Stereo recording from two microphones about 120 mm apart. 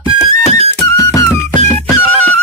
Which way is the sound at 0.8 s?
30° left (ahead or behind).